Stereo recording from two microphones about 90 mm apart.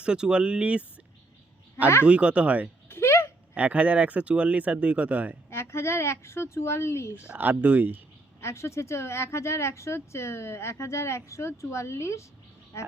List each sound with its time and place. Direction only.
0.0 s speech: 10° right (ahead or behind)
2.0 s speech: 15° right (ahead or behind)
2.9 s a sound: 30° left (ahead or behind)
3.5 s speech: 15° right (ahead or behind)
5.5 s a woman's voice: 30° left (ahead or behind)
7.2 s speech: 15° right (ahead or behind)
8.4 s speech: 30° left (ahead or behind)